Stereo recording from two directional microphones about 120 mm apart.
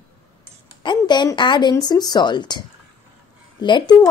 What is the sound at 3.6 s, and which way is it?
Speech, 40° left (ahead or behind).